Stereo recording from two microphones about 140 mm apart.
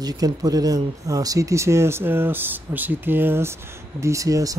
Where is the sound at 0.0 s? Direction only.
25° right (ahead or behind).